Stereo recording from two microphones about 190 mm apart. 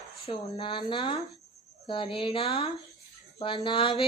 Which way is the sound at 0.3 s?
30° left (ahead or behind).